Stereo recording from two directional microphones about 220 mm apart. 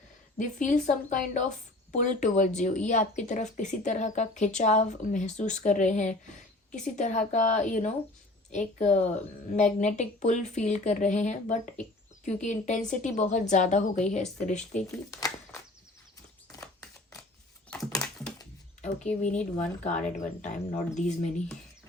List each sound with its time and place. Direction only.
0.3 s a woman's voice: 35° left (ahead or behind)
14.8 s speech: 15° left (ahead or behind)
17.7 s typing: 10° left (ahead or behind)
19.5 s a woman's voice: 30° left (ahead or behind)